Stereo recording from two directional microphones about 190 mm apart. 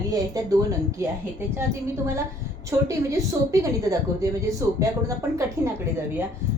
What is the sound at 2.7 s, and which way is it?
A woman's voice, 15° right (ahead or behind).